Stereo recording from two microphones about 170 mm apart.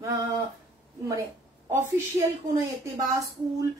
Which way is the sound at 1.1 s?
20° right (ahead or behind).